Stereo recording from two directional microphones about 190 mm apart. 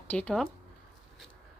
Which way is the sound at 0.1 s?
5° left (ahead or behind).